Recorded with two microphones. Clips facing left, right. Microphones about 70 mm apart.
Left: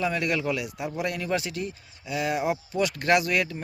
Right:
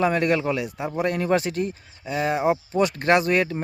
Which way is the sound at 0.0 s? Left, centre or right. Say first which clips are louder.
Right 6 dB; right.